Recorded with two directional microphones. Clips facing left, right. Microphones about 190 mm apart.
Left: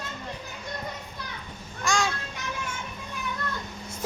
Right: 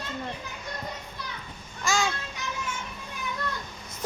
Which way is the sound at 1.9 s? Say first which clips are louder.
Even; centre (ahead or behind).